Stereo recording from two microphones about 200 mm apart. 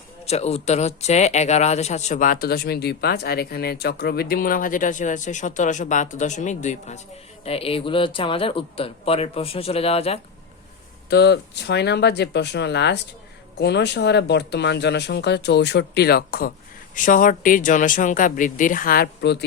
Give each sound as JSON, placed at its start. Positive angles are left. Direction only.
{"t": 0.3, "sound": "speech", "side_deg": 30}
{"t": 11.1, "sound": "speech", "side_deg": 55}